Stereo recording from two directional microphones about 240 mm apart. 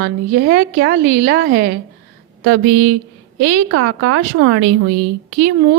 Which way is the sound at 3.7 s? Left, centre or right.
Right.